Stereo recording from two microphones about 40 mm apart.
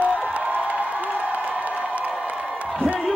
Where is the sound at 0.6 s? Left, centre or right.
Right.